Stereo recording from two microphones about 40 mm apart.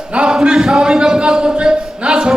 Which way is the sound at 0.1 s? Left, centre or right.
Right.